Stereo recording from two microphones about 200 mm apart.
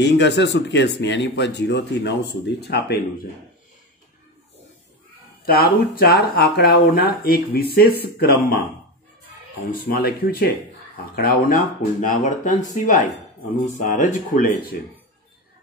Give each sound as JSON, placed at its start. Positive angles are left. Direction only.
{"t": 0.0, "sound": "speech", "side_deg": 60}
{"t": 5.4, "sound": "speech", "side_deg": 50}
{"t": 9.7, "sound": "speech", "side_deg": 50}